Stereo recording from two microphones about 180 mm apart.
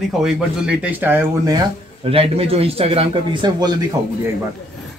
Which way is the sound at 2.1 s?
30° right (ahead or behind).